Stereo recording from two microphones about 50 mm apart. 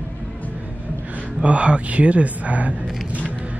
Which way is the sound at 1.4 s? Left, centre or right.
Right.